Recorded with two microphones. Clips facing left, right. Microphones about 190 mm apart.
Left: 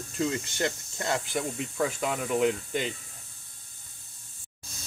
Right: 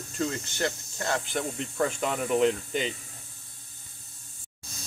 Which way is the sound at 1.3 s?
5° left (ahead or behind).